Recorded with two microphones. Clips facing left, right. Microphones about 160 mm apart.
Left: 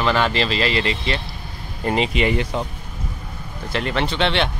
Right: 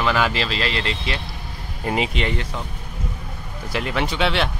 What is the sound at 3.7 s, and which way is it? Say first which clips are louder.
Speech: left 1 dB; 10° right (ahead or behind).